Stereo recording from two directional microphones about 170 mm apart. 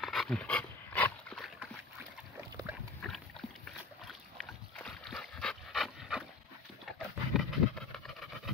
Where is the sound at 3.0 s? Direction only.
5° left (ahead or behind).